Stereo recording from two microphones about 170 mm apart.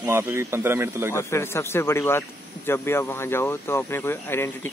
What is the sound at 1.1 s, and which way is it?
Speech, 15° left (ahead or behind).